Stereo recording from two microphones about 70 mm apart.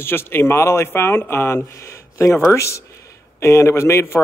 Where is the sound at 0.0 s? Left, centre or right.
Left.